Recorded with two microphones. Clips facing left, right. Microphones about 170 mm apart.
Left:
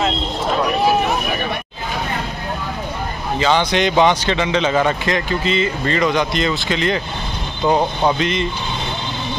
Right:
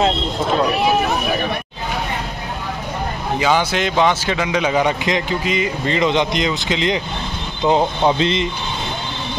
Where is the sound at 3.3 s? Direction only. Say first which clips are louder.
Left 1 dB; 10° right (ahead or behind).